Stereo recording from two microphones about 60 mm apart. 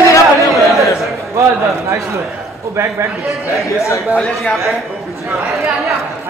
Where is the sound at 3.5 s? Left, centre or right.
Left.